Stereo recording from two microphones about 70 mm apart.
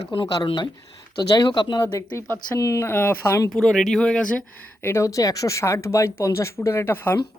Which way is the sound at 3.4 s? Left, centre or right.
Centre.